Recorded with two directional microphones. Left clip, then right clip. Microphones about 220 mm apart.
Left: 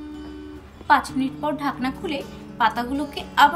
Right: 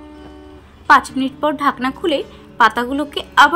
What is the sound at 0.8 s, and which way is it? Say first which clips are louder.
A woman's voice: right 7 dB; 15° right (ahead or behind).